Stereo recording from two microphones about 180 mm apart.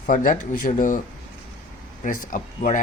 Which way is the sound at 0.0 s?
50° left (ahead or behind).